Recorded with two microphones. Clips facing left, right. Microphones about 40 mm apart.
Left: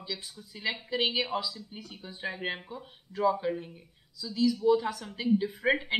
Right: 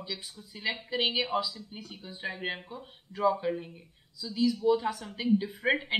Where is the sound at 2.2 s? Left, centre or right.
Centre.